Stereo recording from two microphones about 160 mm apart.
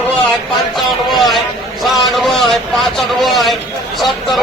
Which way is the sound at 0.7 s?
Centre (ahead or behind).